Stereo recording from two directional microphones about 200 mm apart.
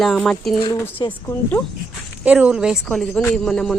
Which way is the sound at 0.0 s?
Centre (ahead or behind).